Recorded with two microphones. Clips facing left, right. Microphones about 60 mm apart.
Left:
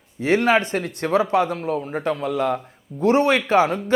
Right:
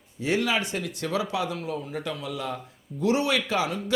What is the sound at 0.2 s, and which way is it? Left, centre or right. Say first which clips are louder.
Speech: left 8 dB; left.